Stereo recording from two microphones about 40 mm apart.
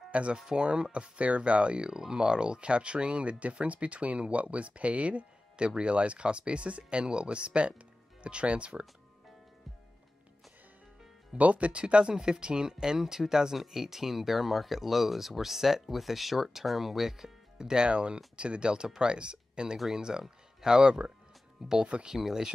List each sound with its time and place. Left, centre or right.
0.1 s speech: right
1.9 s speech: centre
11.3 s speech: right; by 17.3 s centre
17.6 s speech: centre